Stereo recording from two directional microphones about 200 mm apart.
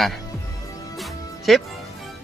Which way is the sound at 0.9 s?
Centre (ahead or behind).